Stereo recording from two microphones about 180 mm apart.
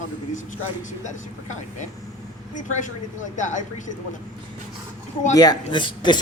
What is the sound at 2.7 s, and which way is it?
Speech, 45° left (ahead or behind).